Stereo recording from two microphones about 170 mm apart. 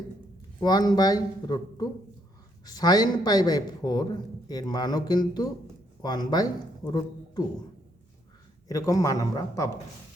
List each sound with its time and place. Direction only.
0.6 s speech: 25° left (ahead or behind)
8.6 s speech: 20° left (ahead or behind)